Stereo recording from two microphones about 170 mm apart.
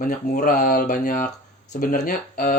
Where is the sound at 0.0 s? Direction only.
55° left (ahead or behind).